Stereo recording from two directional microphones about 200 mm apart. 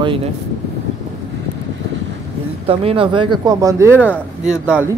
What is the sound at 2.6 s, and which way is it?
Speech, 30° right (ahead or behind).